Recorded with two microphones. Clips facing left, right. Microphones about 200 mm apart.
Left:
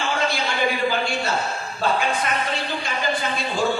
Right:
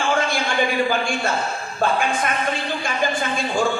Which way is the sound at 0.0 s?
50° right (ahead or behind).